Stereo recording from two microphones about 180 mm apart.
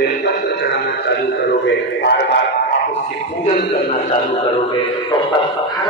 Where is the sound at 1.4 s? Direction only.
75° left (ahead or behind).